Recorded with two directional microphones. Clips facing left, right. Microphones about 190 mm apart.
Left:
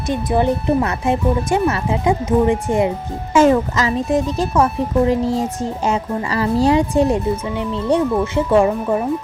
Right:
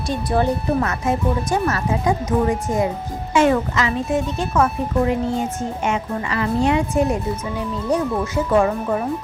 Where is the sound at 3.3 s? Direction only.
40° left (ahead or behind).